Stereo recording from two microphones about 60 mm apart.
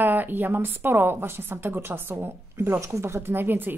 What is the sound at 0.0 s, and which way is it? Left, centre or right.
A woman's voice, right.